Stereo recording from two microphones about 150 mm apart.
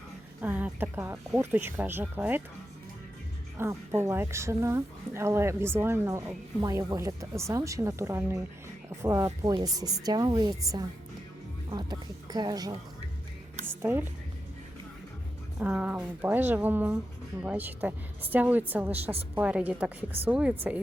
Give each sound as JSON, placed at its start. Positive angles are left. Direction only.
{"t": 0.4, "sound": "a woman's voice", "side_deg": -10}
{"t": 3.6, "sound": "a woman's voice", "side_deg": -20}
{"t": 13.7, "sound": "a sound", "side_deg": -15}
{"t": 15.5, "sound": "a woman's voice", "side_deg": -10}